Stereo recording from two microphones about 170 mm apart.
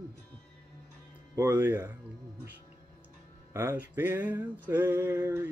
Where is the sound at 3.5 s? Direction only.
15° right (ahead or behind).